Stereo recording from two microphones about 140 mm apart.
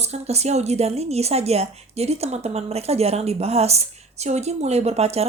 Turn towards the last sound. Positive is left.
turn(degrees=-50)  # may be behind; listen again after turning